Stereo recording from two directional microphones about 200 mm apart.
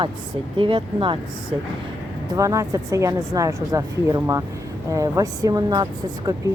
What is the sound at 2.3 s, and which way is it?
A woman's voice, 15° right (ahead or behind).